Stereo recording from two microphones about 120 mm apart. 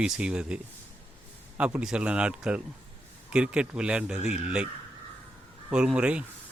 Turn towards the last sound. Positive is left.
turn(degrees=-10)  # may be behind; listen again after turning